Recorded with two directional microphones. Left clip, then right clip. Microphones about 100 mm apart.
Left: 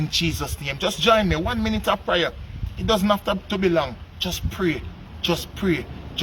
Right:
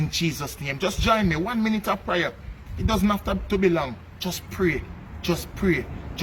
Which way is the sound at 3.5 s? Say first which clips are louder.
Right 3 dB; 60° left (ahead or behind).